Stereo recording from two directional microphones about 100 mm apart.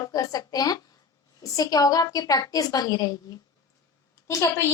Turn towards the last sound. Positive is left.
turn(degrees=30)  # may be behind; listen again after turning